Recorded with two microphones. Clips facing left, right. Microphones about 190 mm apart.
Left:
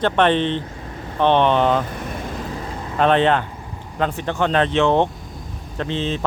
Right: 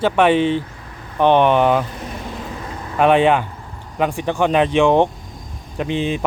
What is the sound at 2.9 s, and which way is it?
Speech, 10° right (ahead or behind).